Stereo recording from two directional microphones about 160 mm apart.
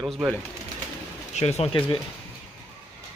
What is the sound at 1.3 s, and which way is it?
Speech, 40° left (ahead or behind).